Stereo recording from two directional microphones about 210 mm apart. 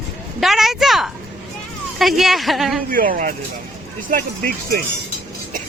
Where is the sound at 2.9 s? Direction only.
40° right (ahead or behind).